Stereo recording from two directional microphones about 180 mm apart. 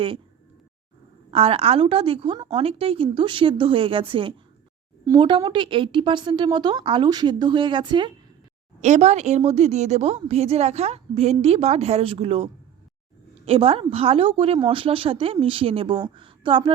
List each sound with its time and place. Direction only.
1.3 s a woman's voice: 35° right (ahead or behind)
8.8 s a woman's voice: 40° right (ahead or behind)